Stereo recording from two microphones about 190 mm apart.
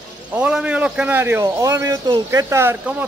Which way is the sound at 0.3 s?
5° right (ahead or behind).